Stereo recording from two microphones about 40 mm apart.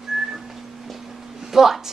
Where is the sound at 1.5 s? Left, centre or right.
Centre.